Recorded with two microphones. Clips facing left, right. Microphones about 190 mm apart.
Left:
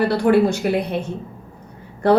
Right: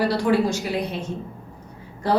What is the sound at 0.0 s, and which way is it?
Speech, 55° left (ahead or behind).